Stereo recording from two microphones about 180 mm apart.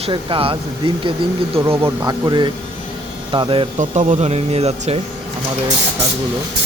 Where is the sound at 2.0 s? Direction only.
20° right (ahead or behind).